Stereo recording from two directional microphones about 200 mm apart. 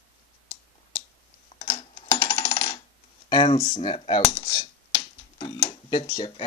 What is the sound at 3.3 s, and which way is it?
Speech, 25° left (ahead or behind).